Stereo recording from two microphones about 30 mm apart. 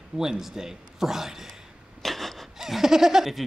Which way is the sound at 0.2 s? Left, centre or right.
Centre.